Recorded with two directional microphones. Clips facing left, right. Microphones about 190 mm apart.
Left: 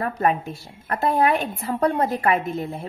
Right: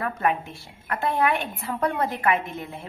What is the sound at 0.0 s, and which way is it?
A woman's voice, 40° left (ahead or behind).